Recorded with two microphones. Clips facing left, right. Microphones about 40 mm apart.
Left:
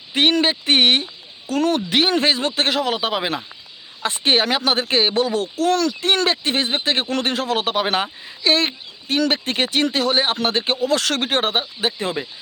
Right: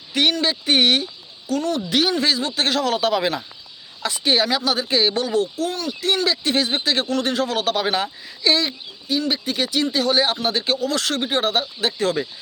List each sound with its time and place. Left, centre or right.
0.1 s speech: left
1.5 s speech: left
1.9 s a man's voice: left
4.0 s speech: left
7.1 s speech: left
8.4 s speech: left
9.1 s speech: left
10.3 s speech: left
10.6 s speech: left
11.8 s a man's voice: left